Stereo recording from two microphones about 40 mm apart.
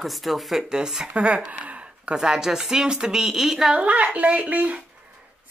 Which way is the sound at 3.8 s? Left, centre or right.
Right.